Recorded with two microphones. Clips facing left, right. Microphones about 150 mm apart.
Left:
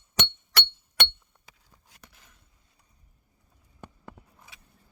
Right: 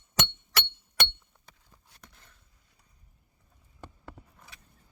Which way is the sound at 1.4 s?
10° left (ahead or behind).